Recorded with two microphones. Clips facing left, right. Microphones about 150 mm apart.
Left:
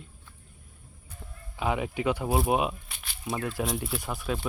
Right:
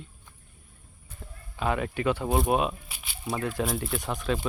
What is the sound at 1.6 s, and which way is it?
Speech, 15° left (ahead or behind).